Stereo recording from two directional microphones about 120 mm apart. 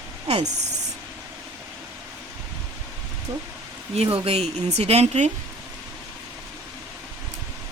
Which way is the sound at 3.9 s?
50° right (ahead or behind).